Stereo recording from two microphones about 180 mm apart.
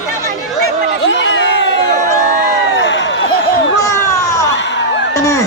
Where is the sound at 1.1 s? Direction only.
90° left.